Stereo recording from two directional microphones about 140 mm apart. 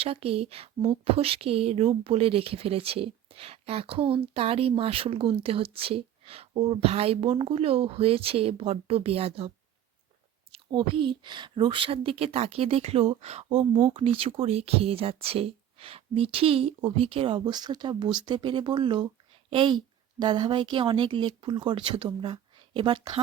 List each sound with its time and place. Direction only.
0.0 s speech: 45° right (ahead or behind)
10.5 s speech: 40° right (ahead or behind)